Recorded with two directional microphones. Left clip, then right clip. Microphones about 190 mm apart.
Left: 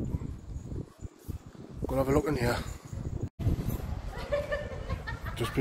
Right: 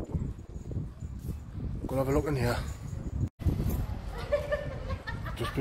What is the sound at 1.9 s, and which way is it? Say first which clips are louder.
Speech: left 2 dB; 10° left (ahead or behind).